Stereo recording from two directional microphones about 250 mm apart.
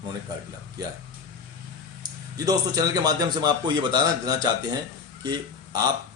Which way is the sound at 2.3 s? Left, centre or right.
Centre.